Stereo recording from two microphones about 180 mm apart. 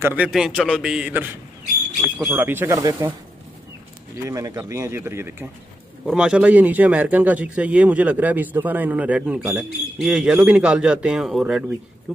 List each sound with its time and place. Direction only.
0.0 s a man's voice: 10° right (ahead or behind)
4.3 s a man's voice: 20° right (ahead or behind); by 11.6 s centre (ahead or behind)